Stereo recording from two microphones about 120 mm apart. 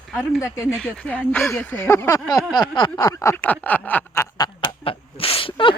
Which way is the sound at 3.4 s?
15° left (ahead or behind).